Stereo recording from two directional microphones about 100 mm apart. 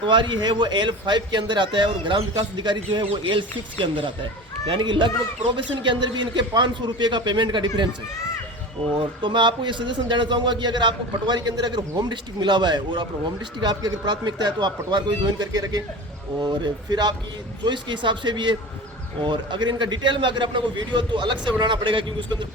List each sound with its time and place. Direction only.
0.0 s a man's voice: 55° right (ahead or behind)
9.0 s a man's voice: 55° right (ahead or behind)